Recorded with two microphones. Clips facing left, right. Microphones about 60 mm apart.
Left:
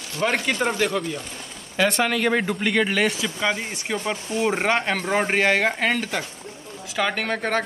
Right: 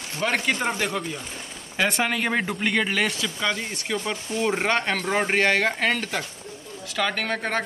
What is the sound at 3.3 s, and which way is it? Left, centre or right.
Speech, centre.